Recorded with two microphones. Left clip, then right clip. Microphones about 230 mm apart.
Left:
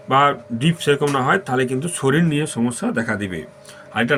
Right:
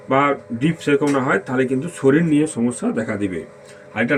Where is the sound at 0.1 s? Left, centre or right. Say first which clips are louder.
Left 2 dB; left.